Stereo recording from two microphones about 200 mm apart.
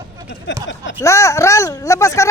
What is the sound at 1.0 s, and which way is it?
Speech, 15° left (ahead or behind).